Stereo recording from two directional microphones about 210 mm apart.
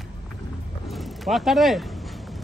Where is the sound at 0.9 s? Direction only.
Centre (ahead or behind).